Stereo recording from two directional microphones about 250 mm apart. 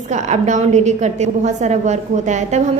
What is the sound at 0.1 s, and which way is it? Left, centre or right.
A woman's voice, right.